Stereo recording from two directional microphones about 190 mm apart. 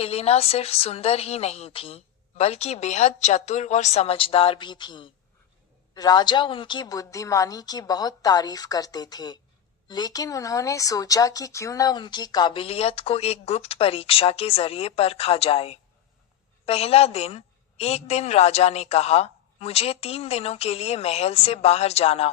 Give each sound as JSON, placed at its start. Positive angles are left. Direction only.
{"t": 0.0, "sound": "a woman's voice", "side_deg": 30}